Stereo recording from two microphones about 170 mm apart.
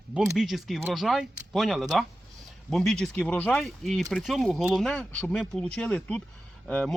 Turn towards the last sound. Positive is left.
turn(degrees=5)  # may be behind; listen again after turning